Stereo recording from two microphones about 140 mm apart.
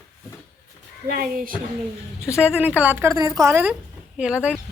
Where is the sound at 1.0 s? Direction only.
90° right.